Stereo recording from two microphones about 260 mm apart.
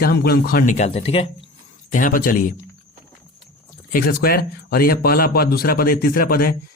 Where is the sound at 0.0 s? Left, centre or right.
Left.